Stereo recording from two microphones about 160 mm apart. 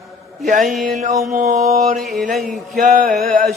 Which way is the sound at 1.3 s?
50° right (ahead or behind).